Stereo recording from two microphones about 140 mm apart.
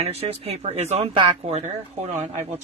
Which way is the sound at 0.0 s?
45° right (ahead or behind).